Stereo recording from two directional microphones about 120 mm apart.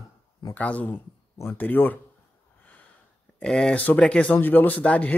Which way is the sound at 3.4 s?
5° left (ahead or behind).